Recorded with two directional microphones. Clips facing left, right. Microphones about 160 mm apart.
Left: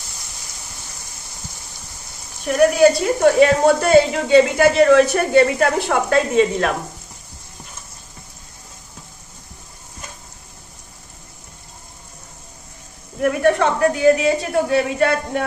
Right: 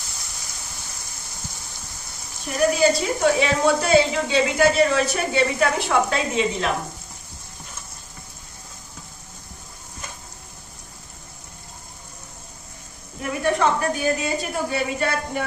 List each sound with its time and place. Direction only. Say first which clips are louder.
2.5 s a woman's voice: left 6 dB; 55° left (ahead or behind)
13.2 s a woman's voice: left 5 dB; 70° left (ahead or behind)